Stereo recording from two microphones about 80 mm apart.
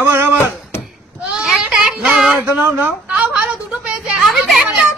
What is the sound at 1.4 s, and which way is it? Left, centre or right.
Children playing, centre.